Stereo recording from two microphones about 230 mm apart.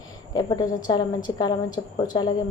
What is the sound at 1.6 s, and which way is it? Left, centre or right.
Speech, left.